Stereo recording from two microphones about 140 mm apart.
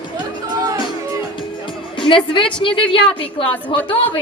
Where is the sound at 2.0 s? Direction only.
35° left (ahead or behind).